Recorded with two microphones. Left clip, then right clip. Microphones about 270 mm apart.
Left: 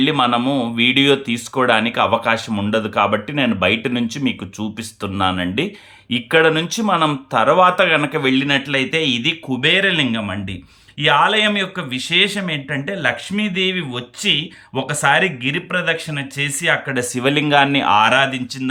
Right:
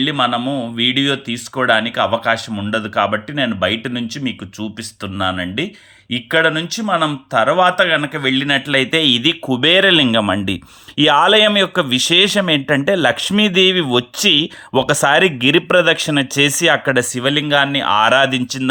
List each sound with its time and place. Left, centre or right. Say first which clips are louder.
0.0 s speech: left 1 dB; centre